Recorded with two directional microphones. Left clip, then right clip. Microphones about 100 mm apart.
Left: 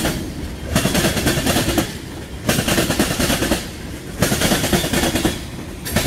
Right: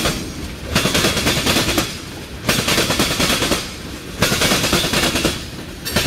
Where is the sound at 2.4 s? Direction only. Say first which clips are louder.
Right 2 dB; 15° right (ahead or behind).